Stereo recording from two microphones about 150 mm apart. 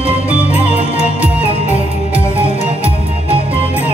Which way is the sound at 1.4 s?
45° left (ahead or behind).